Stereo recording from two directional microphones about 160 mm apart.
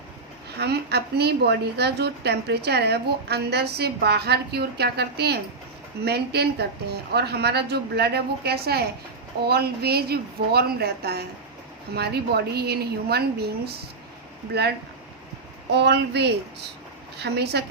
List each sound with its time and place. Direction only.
0.6 s a woman's voice: 90° right
14.5 s a woman's voice: 90° right
15.7 s a woman's voice: 90° right